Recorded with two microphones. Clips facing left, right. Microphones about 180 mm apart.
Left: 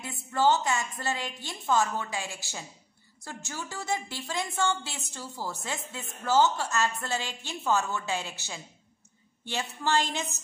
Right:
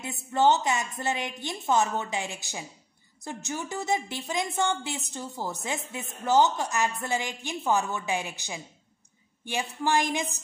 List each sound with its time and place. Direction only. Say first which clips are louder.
0.0 s a woman's voice: right 2 dB; 20° right (ahead or behind)